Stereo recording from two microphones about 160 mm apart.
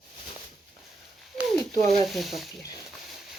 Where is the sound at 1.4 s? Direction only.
Centre (ahead or behind).